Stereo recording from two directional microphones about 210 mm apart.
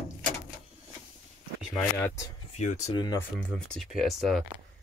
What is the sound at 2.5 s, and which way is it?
Speech, 35° left (ahead or behind).